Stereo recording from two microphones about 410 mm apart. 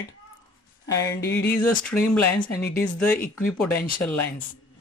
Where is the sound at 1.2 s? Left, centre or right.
Left.